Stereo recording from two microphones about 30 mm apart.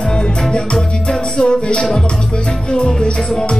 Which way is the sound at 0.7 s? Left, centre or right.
Left.